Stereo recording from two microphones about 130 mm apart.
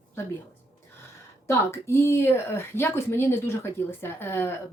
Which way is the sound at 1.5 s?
20° left (ahead or behind).